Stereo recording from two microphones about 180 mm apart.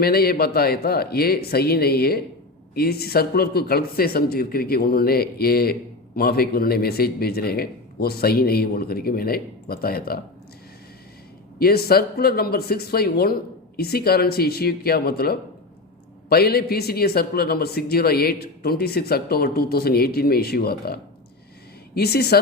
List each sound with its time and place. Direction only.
0.0 s a man's voice: 60° left (ahead or behind)
11.6 s a man's voice: 60° left (ahead or behind)